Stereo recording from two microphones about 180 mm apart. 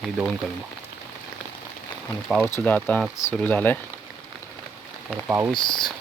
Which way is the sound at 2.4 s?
10° left (ahead or behind).